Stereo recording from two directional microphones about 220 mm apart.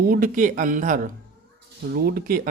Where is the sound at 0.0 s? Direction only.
40° right (ahead or behind).